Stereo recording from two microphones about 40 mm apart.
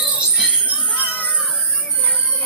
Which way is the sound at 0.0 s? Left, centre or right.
Right.